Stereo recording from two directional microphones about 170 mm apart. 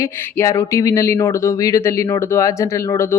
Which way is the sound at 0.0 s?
15° left (ahead or behind).